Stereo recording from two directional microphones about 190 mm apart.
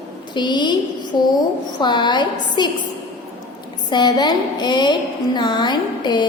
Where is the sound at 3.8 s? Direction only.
25° left (ahead or behind).